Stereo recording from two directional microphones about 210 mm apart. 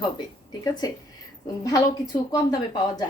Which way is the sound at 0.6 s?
20° left (ahead or behind).